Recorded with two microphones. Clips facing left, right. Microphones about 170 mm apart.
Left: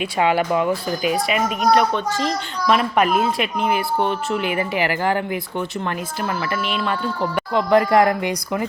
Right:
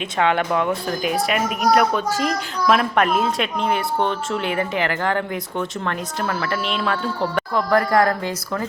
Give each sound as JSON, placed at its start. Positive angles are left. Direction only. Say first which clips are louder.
{"t": 0.2, "sound": "speech", "louder": "left 1 dB", "side_deg": 10}
{"t": 7.5, "sound": "speech", "louder": "left 3 dB", "side_deg": 20}